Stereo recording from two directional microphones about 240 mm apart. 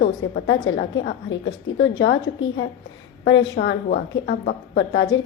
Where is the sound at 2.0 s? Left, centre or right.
Left.